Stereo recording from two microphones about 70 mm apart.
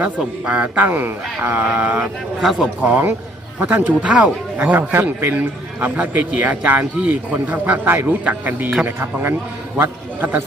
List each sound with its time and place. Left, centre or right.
0.0 s a man's voice: centre
1.6 s a sound: centre
2.4 s a man's voice: centre
2.8 s a man's voice: right
9.7 s a man's voice: right